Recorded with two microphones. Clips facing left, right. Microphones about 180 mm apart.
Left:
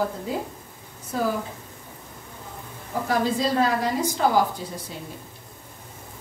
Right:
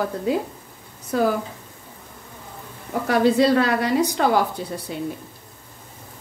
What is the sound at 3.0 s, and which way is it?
A woman's voice, 70° right (ahead or behind).